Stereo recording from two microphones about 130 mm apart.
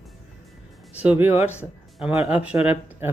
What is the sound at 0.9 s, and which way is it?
Speech, 10° right (ahead or behind).